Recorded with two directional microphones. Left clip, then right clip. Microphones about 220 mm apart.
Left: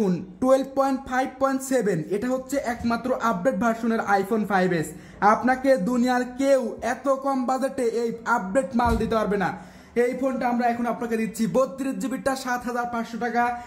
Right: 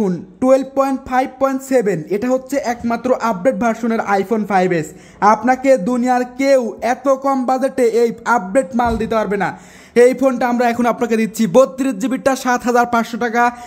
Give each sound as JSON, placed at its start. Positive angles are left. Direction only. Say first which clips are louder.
{"t": 0.0, "sound": "speech", "louder": "right 7 dB", "side_deg": -20}
{"t": 9.9, "sound": "speech", "louder": "right 12 dB", "side_deg": -55}